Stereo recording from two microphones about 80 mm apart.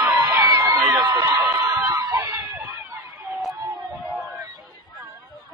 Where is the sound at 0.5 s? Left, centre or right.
Right.